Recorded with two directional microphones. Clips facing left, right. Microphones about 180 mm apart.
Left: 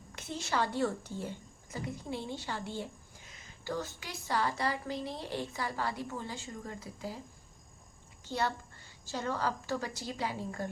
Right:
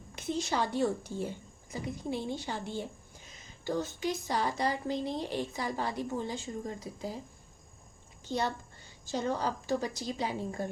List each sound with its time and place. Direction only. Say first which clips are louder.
0.2 s a woman's voice: right 2 dB; 15° right (ahead or behind)
8.2 s a child's voice: right 1 dB; 20° right (ahead or behind)